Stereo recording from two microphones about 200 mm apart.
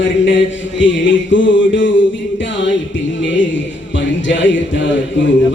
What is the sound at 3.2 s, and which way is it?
Music, 65° left (ahead or behind).